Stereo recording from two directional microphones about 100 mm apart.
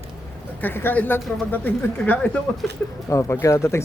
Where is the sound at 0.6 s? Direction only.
20° left (ahead or behind).